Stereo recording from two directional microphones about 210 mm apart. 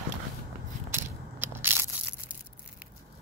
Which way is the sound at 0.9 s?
10° right (ahead or behind).